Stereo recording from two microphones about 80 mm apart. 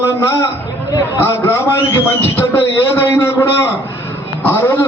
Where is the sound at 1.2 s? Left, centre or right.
Left.